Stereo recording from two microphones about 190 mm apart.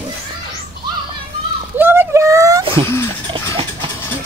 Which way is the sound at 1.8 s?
10° right (ahead or behind).